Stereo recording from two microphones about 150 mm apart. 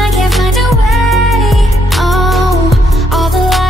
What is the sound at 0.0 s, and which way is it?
Music, centre (ahead or behind).